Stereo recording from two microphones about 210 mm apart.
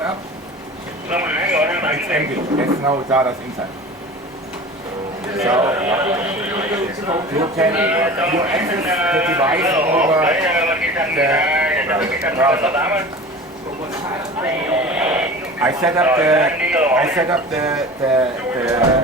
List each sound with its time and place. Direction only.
1.1 s speech: 5° right (ahead or behind)
5.5 s a man's voice: 10° right (ahead or behind)
14.7 s a man's voice: 5° right (ahead or behind)